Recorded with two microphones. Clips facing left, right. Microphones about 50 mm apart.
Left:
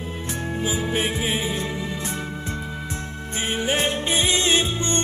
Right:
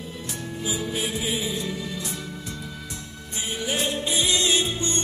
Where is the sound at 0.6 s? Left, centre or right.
Left.